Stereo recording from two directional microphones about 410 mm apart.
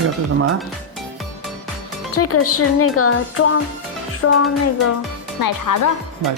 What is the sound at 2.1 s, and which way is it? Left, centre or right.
Speech, left.